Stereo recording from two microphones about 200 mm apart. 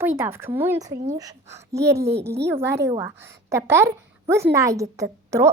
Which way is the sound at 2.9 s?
15° right (ahead or behind).